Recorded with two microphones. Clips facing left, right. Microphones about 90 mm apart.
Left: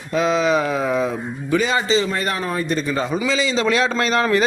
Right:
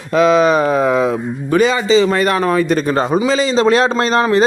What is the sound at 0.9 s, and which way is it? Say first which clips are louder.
A man's voice: right 6 dB; 80° right.